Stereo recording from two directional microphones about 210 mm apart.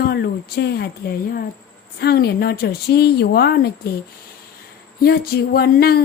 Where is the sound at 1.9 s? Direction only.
50° left (ahead or behind).